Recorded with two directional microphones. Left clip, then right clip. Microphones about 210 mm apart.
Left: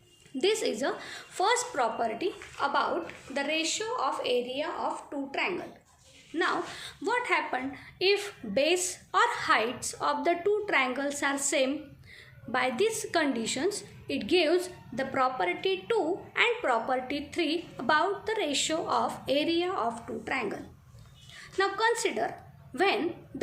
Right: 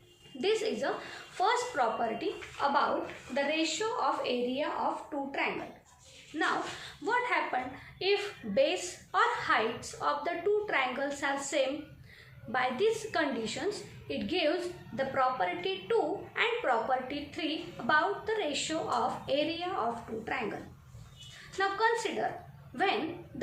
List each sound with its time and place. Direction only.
0.3 s a woman's voice: 45° left (ahead or behind)
21.6 s a woman's voice: 45° left (ahead or behind)